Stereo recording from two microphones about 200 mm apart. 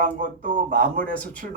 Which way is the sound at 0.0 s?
40° right (ahead or behind).